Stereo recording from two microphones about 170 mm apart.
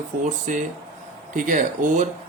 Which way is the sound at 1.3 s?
50° right (ahead or behind).